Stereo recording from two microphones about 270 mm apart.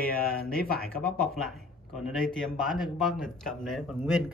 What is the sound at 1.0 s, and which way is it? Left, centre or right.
Speech, centre.